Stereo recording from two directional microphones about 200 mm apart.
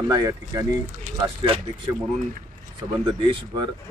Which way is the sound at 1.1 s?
35° right (ahead or behind).